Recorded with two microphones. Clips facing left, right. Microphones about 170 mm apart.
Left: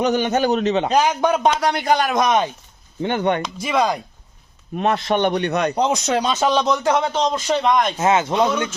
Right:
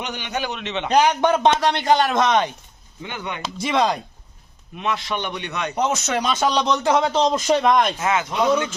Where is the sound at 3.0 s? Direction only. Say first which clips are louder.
Left 11 dB; 50° left (ahead or behind).